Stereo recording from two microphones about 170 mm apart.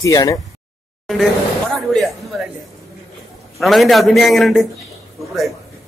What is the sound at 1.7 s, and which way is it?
Speech, centre (ahead or behind).